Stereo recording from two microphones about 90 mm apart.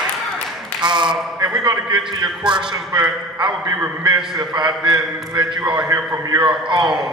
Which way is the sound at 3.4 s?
60° right (ahead or behind).